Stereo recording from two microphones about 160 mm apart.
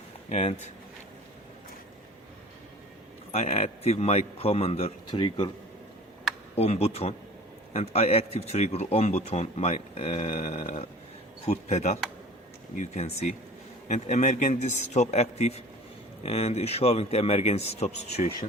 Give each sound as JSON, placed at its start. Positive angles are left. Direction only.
{"t": 0.3, "sound": "a man's voice", "side_deg": 45}
{"t": 3.3, "sound": "a man's voice", "side_deg": 40}
{"t": 6.6, "sound": "a man's voice", "side_deg": 40}